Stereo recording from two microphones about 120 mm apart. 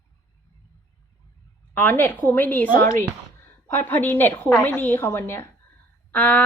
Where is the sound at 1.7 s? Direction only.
15° left (ahead or behind).